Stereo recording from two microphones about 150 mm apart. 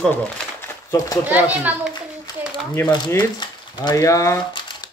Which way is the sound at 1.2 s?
10° right (ahead or behind).